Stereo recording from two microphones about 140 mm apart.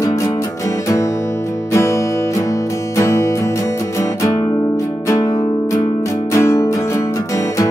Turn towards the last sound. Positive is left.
turn(degrees=20)  # may be behind; listen again after turning